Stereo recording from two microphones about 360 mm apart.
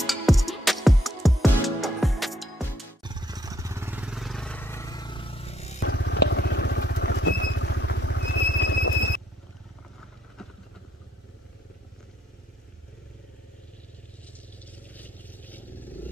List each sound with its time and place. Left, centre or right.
0.0 s music: centre
3.0 s vehicle: centre
5.8 s vehicle: left
15.0 s vehicle: centre